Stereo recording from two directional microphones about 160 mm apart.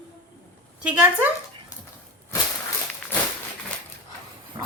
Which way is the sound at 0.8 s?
10° right (ahead or behind).